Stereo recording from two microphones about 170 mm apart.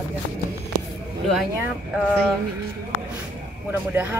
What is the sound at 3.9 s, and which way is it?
Speech, 10° right (ahead or behind).